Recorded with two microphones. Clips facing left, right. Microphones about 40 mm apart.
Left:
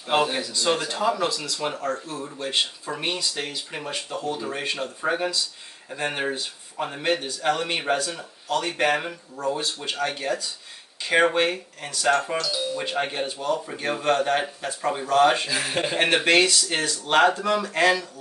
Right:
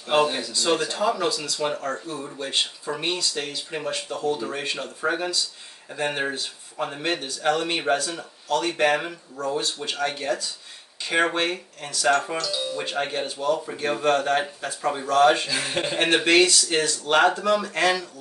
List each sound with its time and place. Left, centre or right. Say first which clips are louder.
0.0 s speech: right 1 dB; centre